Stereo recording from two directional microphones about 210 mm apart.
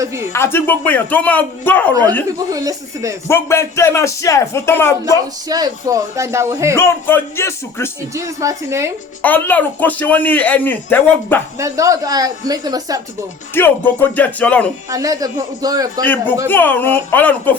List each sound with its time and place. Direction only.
0.3 s speech: 10° left (ahead or behind)
2.5 s speech: 15° right (ahead or behind)
3.2 s speech: 10° left (ahead or behind)
5.1 s speech: 20° right (ahead or behind)
6.7 s speech: 10° left (ahead or behind)
8.1 s speech: 15° right (ahead or behind)
9.2 s speech: 10° left (ahead or behind)
11.5 s speech: 15° right (ahead or behind)
13.5 s speech: 10° left (ahead or behind)
14.8 s speech: 15° right (ahead or behind)
16.5 s speech: 10° left (ahead or behind)